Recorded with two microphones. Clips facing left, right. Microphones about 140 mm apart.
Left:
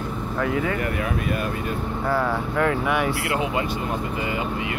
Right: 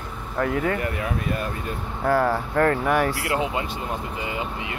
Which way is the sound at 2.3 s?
45° right (ahead or behind).